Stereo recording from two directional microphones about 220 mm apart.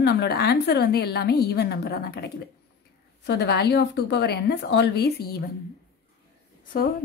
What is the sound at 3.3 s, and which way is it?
A woman's voice, 50° left (ahead or behind).